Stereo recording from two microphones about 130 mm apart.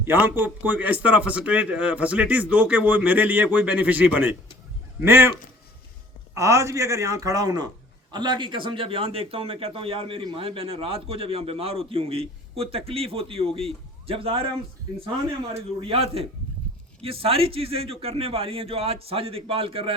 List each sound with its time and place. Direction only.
0.0 s a man's voice: 15° right (ahead or behind)
6.3 s a man's voice: 20° right (ahead or behind); by 14.5 s 45° right (ahead or behind)
15.5 s a man's voice: 45° right (ahead or behind)